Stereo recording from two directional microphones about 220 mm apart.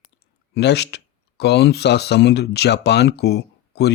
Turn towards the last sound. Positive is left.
turn(degrees=50)  # may be behind; listen again after turning